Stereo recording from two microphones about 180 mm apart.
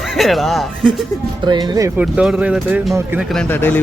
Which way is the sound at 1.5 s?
20° right (ahead or behind).